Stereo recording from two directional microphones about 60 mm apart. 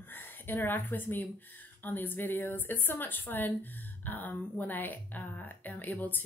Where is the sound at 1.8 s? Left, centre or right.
Left.